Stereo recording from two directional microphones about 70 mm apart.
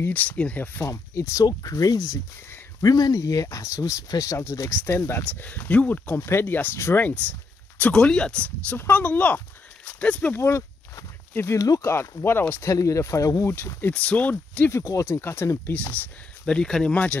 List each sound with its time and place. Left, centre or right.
0.1 s speech: left
0.8 s speech: left
1.4 s speech: left
4.8 s speech: left
7.9 s speech: centre
8.6 s speech: left
10.3 s speech: left
11.5 s speech: left
11.8 s speech: left
12.7 s speech: left
13.9 s speech: centre
14.7 s speech: left
15.7 s speech: left
16.4 s speech: centre